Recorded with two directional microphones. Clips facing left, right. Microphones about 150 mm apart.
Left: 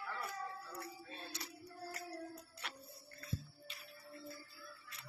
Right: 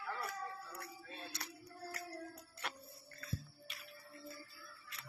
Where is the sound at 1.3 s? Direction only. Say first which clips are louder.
Left 1 dB; 65° right (ahead or behind).